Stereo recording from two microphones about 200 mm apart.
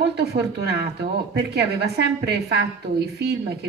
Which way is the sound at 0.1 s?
55° right (ahead or behind).